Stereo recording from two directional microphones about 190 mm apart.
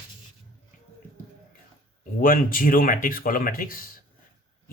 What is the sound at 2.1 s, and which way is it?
Speech, 45° left (ahead or behind).